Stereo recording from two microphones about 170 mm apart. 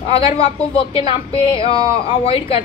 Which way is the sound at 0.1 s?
35° left (ahead or behind).